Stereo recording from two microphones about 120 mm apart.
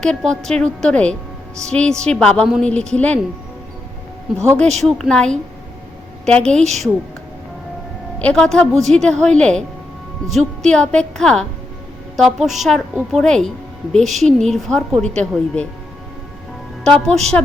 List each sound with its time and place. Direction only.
0.0 s a woman's voice: 5° left (ahead or behind)
4.4 s a woman's voice: 5° left (ahead or behind)
8.2 s a woman's voice: 10° left (ahead or behind)
16.8 s a woman's voice: 5° left (ahead or behind)